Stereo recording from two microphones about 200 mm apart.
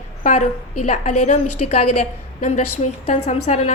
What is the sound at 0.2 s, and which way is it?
A woman's voice, 40° left (ahead or behind).